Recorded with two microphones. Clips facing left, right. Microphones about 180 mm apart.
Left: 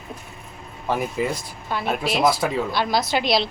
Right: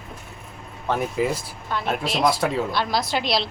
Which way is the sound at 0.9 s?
Centre (ahead or behind).